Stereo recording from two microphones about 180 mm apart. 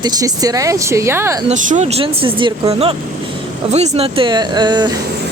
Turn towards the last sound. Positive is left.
turn(degrees=-25)  # may be behind; listen again after turning